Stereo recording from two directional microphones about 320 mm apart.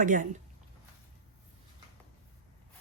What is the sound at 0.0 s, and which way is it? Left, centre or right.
Speech, right.